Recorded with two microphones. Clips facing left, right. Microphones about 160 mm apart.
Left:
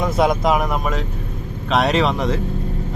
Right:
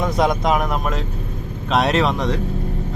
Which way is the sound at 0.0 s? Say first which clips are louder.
Left 1 dB; centre (ahead or behind).